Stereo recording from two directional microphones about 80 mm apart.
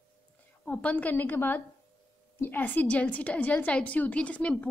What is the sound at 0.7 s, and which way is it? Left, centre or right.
A woman's voice, centre.